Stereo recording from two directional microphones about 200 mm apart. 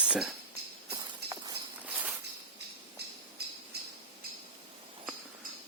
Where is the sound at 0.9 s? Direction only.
20° right (ahead or behind).